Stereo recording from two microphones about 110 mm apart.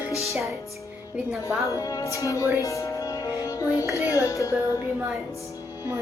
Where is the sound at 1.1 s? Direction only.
10° right (ahead or behind).